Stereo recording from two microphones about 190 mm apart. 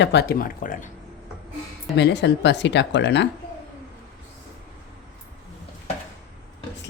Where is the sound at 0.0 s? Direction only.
60° left (ahead or behind); by 0.9 s 45° left (ahead or behind).